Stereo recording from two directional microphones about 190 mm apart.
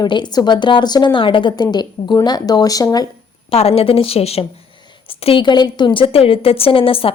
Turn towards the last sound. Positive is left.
turn(degrees=30)  # may be behind; listen again after turning